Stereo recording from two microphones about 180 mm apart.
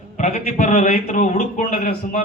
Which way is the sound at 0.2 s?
40° left (ahead or behind).